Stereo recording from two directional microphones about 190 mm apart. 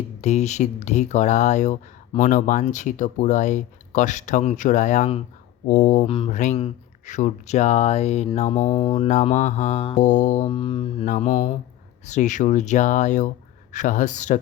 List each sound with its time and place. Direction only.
0.2 s speech: 35° left (ahead or behind)
6.1 s mantra: 25° left (ahead or behind)
6.3 s speech: 40° left (ahead or behind)
10.0 s speech: 40° left (ahead or behind)
10.5 s mantra: 30° left (ahead or behind)
11.0 s speech: 40° left (ahead or behind)